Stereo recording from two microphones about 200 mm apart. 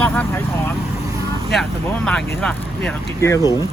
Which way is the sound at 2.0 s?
5° left (ahead or behind).